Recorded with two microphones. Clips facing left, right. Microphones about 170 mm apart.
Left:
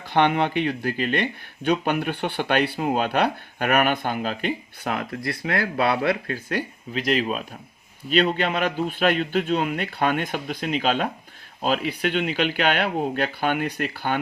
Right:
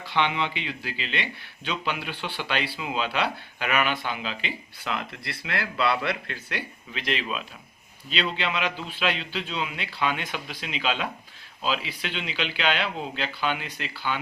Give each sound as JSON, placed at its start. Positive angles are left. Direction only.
{"t": 0.0, "sound": "speech", "side_deg": 50}